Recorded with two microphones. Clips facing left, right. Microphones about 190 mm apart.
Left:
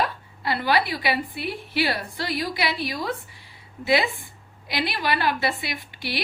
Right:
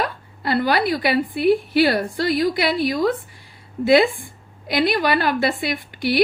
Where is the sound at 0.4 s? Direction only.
45° right (ahead or behind).